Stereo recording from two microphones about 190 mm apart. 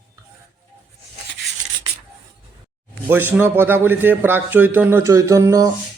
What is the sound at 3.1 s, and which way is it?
A man's voice, 10° right (ahead or behind).